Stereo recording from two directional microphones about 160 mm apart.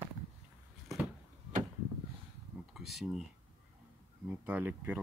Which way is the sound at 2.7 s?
Centre (ahead or behind).